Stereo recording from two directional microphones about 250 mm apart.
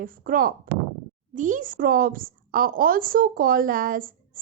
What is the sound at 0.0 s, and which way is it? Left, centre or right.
A woman's voice, right.